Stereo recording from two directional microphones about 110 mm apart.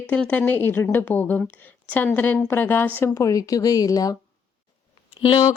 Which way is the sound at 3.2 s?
30° left (ahead or behind).